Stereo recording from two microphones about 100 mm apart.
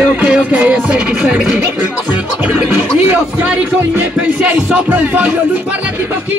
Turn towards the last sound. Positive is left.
turn(degrees=-15)  # may be behind; listen again after turning